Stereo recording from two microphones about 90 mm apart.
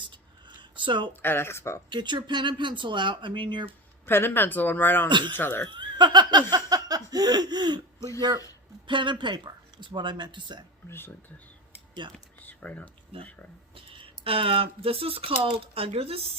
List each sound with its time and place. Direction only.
0.0 s a sound: 60° right (ahead or behind)
1.2 s speech: 25° left (ahead or behind)
1.9 s speech: 60° right (ahead or behind)
4.0 s speech: 25° left (ahead or behind)
5.0 s speech: 55° right (ahead or behind)
5.4 s speech: 25° left (ahead or behind)
5.6 s laughter: 55° right (ahead or behind)
8.9 s speech: 65° right (ahead or behind)
10.8 s speech: 25° left (ahead or behind)
12.0 s speech: 60° right (ahead or behind)
12.4 s computer keyboard: 20° left (ahead or behind)
13.1 s speech: 90° right